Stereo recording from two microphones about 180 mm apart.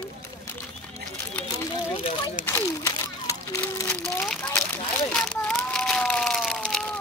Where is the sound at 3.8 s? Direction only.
5° left (ahead or behind).